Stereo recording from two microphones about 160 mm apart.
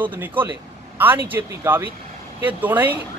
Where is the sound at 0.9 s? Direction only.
10° right (ahead or behind).